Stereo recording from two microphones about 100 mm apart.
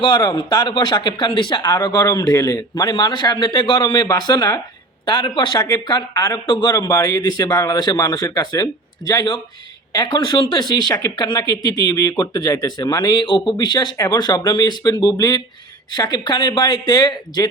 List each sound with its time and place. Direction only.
0.0 s speech: 45° left (ahead or behind)
5.0 s speech: 50° left (ahead or behind)
6.7 s a man's voice: 35° left (ahead or behind)